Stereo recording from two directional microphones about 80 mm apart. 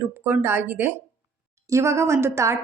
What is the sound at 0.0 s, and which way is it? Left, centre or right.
Speech, right.